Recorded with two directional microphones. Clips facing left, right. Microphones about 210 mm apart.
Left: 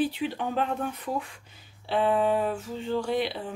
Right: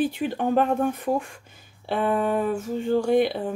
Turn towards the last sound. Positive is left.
turn(degrees=-50)  # may be behind; listen again after turning